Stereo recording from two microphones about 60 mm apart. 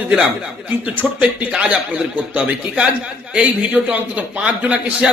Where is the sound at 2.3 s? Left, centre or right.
Right.